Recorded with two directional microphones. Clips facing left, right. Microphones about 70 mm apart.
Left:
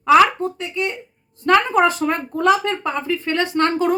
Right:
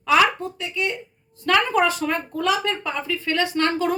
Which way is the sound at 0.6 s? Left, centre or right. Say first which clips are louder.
Left 2 dB; left.